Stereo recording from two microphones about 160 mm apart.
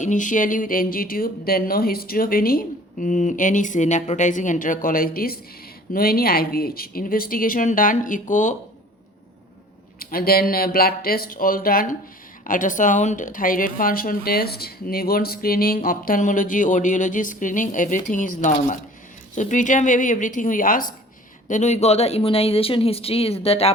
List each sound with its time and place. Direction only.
0.0 s speech: 50° left (ahead or behind)
10.0 s a woman's voice: 65° left (ahead or behind)
21.4 s speech: 50° left (ahead or behind)